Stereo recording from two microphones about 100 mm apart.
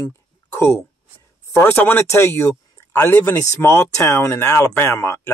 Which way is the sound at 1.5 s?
25° left (ahead or behind).